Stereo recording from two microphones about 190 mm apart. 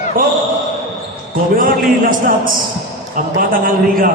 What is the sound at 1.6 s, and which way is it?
Speech, 45° right (ahead or behind).